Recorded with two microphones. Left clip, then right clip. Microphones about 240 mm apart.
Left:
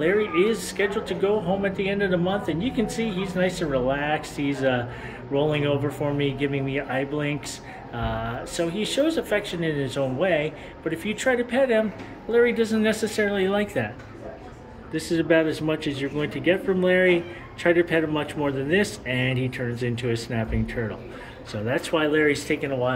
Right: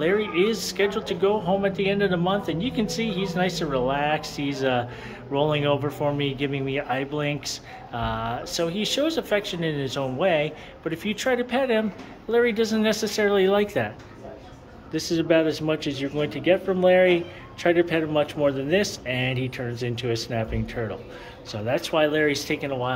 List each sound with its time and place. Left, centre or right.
0.0 s speech: centre